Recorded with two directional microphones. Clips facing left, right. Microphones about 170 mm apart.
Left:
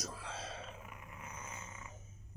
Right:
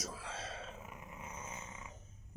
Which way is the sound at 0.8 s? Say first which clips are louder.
Right 2 dB; 25° right (ahead or behind).